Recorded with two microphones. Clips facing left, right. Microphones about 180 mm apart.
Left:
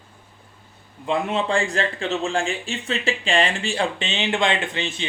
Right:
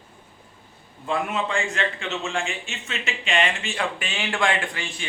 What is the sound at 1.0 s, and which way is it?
A man's voice, 25° left (ahead or behind).